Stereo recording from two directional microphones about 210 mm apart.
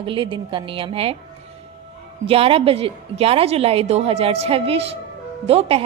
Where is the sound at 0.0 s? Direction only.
25° right (ahead or behind).